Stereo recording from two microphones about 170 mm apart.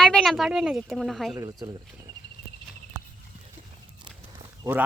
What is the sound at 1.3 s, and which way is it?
Speech, 20° right (ahead or behind).